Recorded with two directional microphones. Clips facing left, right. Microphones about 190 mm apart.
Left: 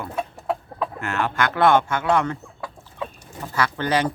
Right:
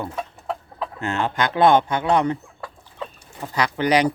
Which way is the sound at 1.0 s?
20° right (ahead or behind).